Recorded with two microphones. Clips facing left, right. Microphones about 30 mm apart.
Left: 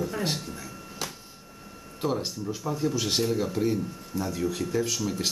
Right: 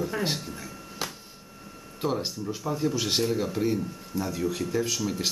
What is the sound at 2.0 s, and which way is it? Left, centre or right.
Speech, centre.